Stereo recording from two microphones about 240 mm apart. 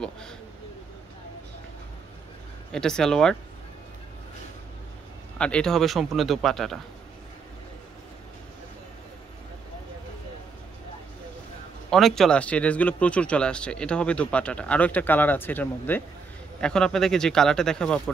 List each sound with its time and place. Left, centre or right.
2.7 s speech: centre
5.4 s speech: centre
11.9 s speech: centre